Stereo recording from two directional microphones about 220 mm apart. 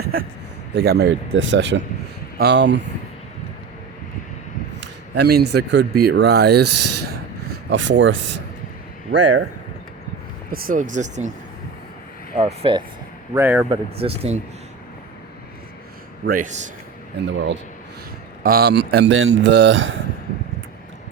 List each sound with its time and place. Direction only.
0.0 s a sound: 40° right (ahead or behind)
0.7 s speech: 45° right (ahead or behind)
5.1 s speech: 50° right (ahead or behind)
7.7 s speech: 55° right (ahead or behind)
10.5 s a man's voice: 40° right (ahead or behind)
12.4 s speech: 25° right (ahead or behind)
13.3 s speech: 10° right (ahead or behind)
13.7 s speech: 25° right (ahead or behind)
16.2 s a man's voice: 40° right (ahead or behind)
17.3 s speech: 55° right (ahead or behind)
18.4 s speech: 45° right (ahead or behind)